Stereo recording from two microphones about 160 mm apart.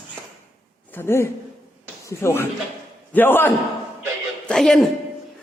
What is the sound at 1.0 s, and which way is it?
Speech, 15° left (ahead or behind).